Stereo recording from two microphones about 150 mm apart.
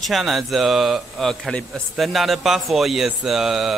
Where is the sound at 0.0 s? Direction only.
Centre (ahead or behind).